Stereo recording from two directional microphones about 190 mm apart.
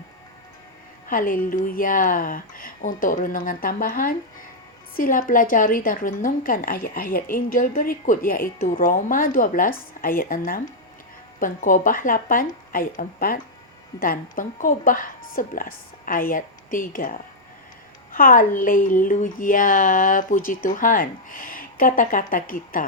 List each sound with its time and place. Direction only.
1.0 s speech: 45° left (ahead or behind)